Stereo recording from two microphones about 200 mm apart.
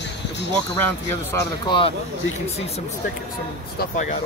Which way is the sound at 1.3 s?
20° left (ahead or behind).